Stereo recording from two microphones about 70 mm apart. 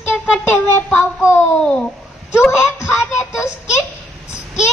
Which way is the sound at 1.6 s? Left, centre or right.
Centre.